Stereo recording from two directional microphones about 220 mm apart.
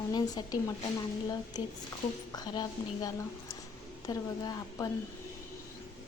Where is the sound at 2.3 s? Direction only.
20° left (ahead or behind).